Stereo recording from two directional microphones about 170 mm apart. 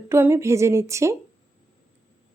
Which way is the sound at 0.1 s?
15° right (ahead or behind).